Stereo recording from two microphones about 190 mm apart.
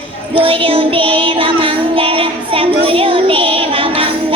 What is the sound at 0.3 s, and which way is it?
Child singing, 30° right (ahead or behind).